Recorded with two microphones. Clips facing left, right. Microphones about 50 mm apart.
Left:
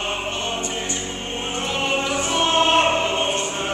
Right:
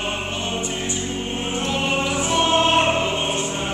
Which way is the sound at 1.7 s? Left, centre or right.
Centre.